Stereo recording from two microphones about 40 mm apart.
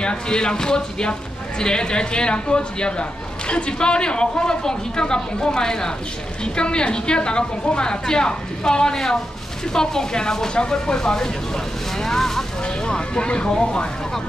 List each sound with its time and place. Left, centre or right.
0.0 s speech: left
12.6 s speech: left